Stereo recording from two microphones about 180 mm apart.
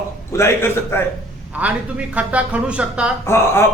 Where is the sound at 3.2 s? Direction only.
15° left (ahead or behind).